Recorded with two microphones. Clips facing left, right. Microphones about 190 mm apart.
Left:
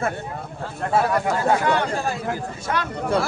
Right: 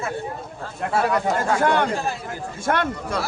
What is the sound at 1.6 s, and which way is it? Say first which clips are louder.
Speech: right 2 dB; 50° right (ahead or behind).